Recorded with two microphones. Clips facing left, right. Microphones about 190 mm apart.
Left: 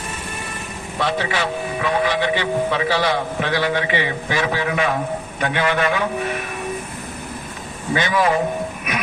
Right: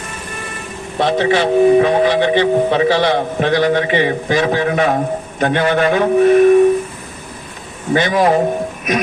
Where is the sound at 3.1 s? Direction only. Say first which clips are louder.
Right 6 dB; 50° right (ahead or behind).